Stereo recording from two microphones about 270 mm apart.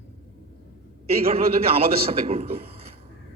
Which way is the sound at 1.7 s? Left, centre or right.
Right.